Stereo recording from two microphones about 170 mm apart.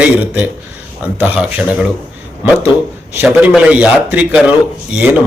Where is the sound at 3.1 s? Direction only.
5° right (ahead or behind).